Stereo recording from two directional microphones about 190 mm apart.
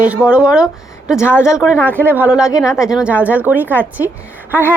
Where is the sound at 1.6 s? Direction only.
Centre (ahead or behind).